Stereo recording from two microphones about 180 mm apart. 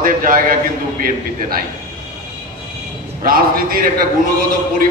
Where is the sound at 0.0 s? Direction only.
50° right (ahead or behind).